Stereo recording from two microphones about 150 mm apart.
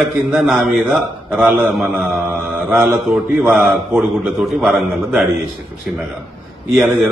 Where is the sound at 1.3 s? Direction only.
10° right (ahead or behind).